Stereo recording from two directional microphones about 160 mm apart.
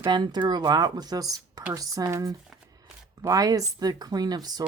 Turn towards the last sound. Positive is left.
turn(degrees=-25)  # may be behind; listen again after turning